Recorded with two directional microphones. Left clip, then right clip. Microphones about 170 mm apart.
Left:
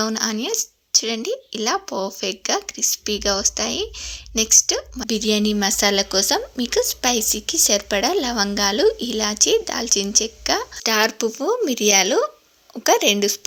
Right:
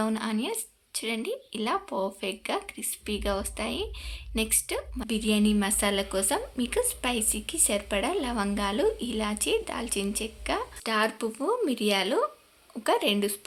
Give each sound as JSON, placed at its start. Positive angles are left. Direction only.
{"t": 0.0, "sound": "a woman's voice", "side_deg": 30}